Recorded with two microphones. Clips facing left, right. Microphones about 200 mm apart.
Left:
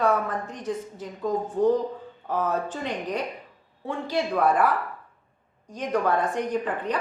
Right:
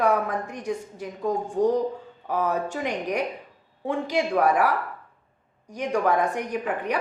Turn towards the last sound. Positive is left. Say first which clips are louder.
# even
turn(degrees=-10)  # may be behind; listen again after turning